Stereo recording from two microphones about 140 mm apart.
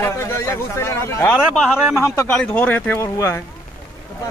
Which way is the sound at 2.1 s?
10° left (ahead or behind).